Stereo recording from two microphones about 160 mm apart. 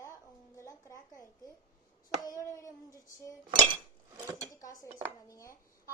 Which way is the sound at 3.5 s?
30° right (ahead or behind).